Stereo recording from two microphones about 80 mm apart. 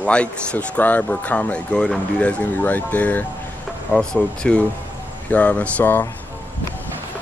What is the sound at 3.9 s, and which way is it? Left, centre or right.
Speech, centre.